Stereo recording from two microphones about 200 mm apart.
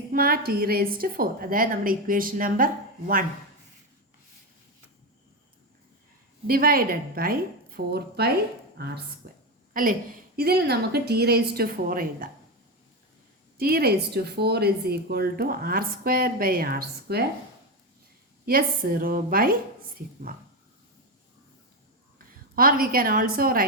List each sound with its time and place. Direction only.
0.1 s speech: 50° right (ahead or behind)
6.5 s speech: 45° right (ahead or behind)
9.2 s a sound: 50° right (ahead or behind)
9.7 s speech: 45° right (ahead or behind)
13.6 s speech: 50° right (ahead or behind)
18.4 s speech: 45° right (ahead or behind)
22.5 s speech: 45° right (ahead or behind)